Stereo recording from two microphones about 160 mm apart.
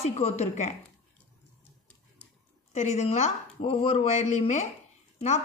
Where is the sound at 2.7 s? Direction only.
45° left (ahead or behind).